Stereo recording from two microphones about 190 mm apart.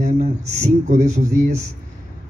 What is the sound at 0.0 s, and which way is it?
Speech, 35° right (ahead or behind).